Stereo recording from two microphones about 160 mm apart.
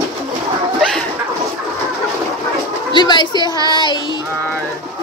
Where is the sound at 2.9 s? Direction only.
30° left (ahead or behind).